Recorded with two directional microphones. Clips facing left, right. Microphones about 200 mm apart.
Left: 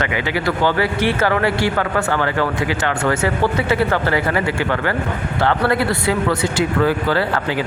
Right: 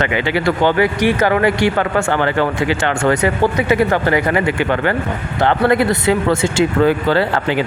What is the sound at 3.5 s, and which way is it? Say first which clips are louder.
Speech: right 3 dB; 15° right (ahead or behind).